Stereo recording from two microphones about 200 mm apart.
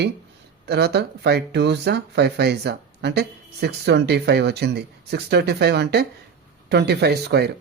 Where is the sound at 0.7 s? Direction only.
55° right (ahead or behind).